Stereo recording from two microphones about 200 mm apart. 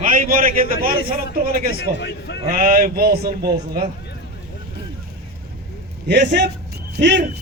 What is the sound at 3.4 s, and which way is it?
Speech, 20° right (ahead or behind).